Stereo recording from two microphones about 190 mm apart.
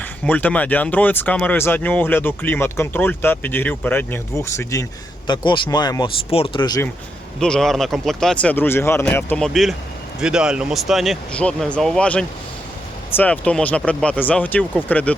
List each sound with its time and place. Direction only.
0.0 s speech: 10° left (ahead or behind)
7.3 s a man's voice: 5° left (ahead or behind)